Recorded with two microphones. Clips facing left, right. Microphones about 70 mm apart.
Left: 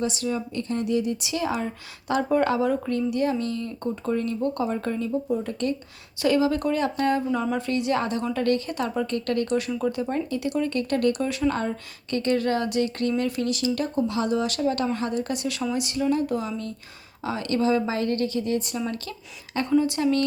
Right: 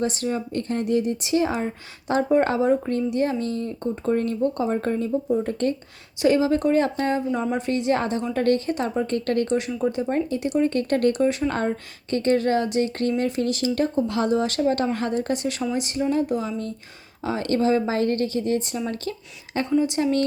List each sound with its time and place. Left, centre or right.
0.0 s speech: right
4.4 s speech: right
4.7 s speech: right
6.2 s speech: right
19.8 s speech: right